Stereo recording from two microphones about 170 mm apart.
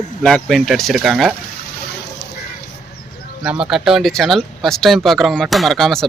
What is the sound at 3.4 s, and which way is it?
Speech, 5° right (ahead or behind).